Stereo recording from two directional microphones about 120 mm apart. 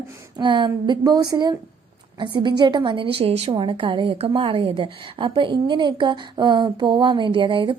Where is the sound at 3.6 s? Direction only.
45° right (ahead or behind).